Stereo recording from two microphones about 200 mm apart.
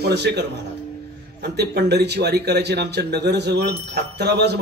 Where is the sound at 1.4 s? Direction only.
55° right (ahead or behind).